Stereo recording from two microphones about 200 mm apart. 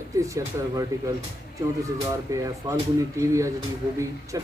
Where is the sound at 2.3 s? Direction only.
15° right (ahead or behind).